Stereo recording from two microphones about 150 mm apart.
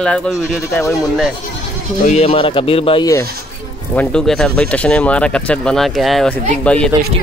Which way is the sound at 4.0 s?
5° left (ahead or behind).